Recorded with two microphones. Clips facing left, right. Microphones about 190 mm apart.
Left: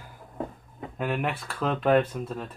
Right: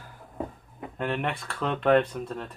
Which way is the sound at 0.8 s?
5° left (ahead or behind).